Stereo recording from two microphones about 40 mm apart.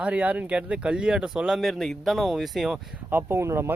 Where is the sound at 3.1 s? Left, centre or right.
Right.